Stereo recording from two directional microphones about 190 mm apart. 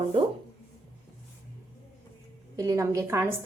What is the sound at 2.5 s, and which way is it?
Speech, 20° right (ahead or behind).